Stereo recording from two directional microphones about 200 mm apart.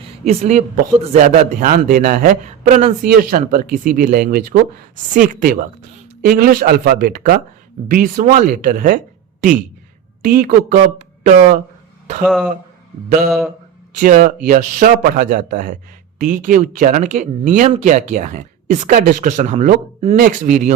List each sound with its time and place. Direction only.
0.3 s speech: 35° right (ahead or behind)
10.2 s speech: 45° right (ahead or behind)
12.2 s speech: centre (ahead or behind)
13.1 s speech: 45° right (ahead or behind)
20.1 s speech: 40° right (ahead or behind)